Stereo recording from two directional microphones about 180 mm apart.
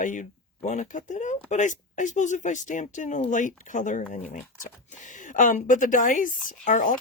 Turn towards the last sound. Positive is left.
turn(degrees=45)  # may be behind; listen again after turning